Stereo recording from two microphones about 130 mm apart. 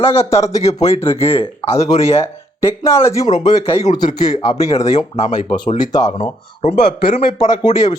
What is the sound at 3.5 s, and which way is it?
Speech, 50° left (ahead or behind).